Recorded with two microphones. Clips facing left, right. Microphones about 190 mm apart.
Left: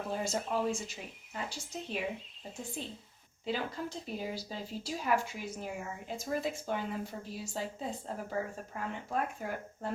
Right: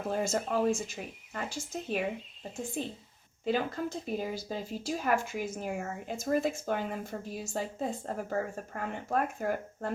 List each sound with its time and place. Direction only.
0.1 s speech: 50° right (ahead or behind)
3.4 s speech: 50° right (ahead or behind)